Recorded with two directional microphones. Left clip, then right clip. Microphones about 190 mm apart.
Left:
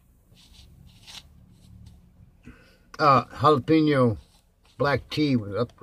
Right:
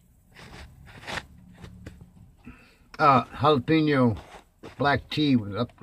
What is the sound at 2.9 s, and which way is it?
Speech, 15° right (ahead or behind).